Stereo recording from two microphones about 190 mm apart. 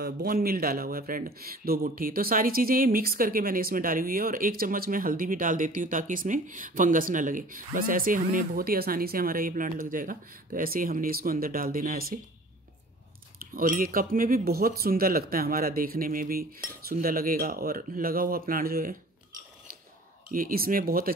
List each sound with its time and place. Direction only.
0.0 s speech: 50° right (ahead or behind)
13.4 s speech: 50° right (ahead or behind)
20.2 s speech: 45° right (ahead or behind)